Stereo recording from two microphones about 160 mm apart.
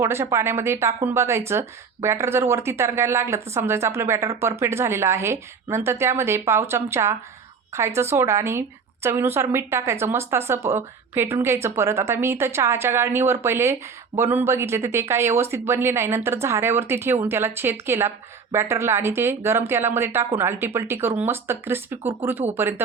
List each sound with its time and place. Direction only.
0.0 s speech: 15° right (ahead or behind)